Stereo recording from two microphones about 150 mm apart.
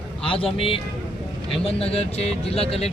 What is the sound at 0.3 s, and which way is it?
A man's voice, 35° left (ahead or behind).